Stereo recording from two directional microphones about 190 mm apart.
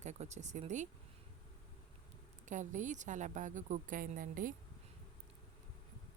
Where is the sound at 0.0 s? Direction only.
35° right (ahead or behind).